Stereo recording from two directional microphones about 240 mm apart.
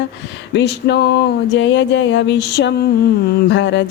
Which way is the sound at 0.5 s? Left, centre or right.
Left.